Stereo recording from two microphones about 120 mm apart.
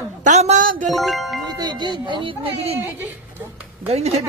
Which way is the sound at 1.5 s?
35° right (ahead or behind).